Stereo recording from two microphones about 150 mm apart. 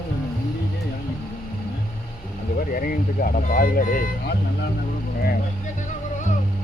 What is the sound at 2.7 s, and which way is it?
Speech, 70° left (ahead or behind).